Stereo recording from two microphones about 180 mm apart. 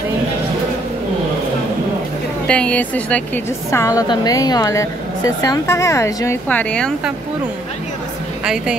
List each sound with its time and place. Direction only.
2.4 s a woman's voice: 5° left (ahead or behind)
3.7 s a woman's voice: 20° left (ahead or behind)